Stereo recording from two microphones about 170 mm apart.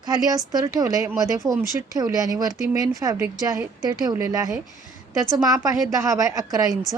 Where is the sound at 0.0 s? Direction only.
25° right (ahead or behind).